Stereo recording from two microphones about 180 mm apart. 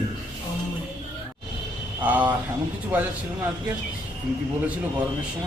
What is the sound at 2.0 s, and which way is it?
Speech, 10° right (ahead or behind).